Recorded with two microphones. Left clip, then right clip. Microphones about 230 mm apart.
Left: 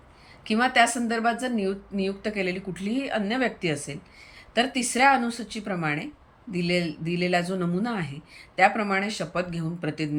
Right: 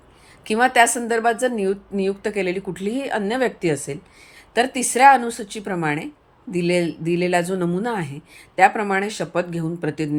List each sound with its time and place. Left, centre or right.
0.4 s speech: centre